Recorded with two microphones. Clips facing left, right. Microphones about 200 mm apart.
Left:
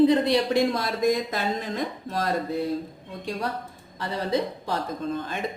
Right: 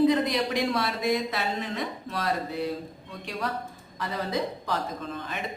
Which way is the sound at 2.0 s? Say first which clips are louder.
Left 3 dB; 40° left (ahead or behind).